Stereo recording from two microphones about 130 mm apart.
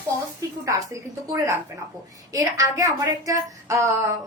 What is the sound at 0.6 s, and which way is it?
Speech, 25° right (ahead or behind).